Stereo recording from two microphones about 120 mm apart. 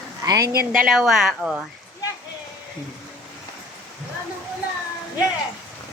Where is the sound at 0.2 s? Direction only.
30° right (ahead or behind).